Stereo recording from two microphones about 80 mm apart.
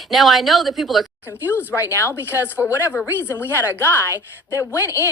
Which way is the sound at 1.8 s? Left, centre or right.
Left.